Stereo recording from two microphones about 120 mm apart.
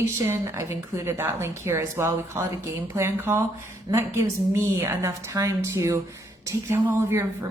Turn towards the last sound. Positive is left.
turn(degrees=-25)  # may be behind; listen again after turning